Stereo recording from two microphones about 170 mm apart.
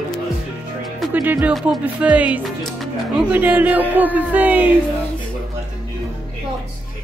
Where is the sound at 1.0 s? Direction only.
10° right (ahead or behind).